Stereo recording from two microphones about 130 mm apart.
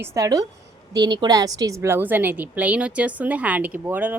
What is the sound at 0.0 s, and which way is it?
A woman's voice, 25° right (ahead or behind).